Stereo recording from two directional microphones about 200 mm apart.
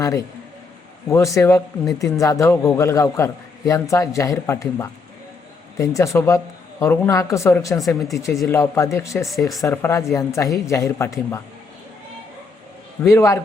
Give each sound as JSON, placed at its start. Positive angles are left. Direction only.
{"t": 1.1, "sound": "a man's voice", "side_deg": 15}
{"t": 7.8, "sound": "speech", "side_deg": 0}
{"t": 8.4, "sound": "a man's voice", "side_deg": 15}
{"t": 9.3, "sound": "speech", "side_deg": 0}
{"t": 9.6, "sound": "a man's voice", "side_deg": 10}
{"t": 13.0, "sound": "a man's voice", "side_deg": 15}